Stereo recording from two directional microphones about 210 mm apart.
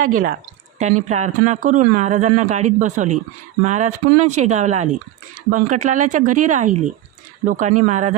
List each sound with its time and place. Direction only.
0.0 s speech: 40° right (ahead or behind)